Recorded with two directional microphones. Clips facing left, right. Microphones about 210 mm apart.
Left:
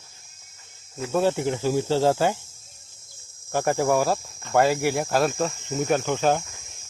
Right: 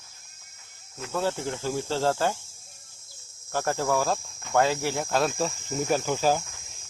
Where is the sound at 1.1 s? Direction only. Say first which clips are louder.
Left 6 dB; 15° left (ahead or behind).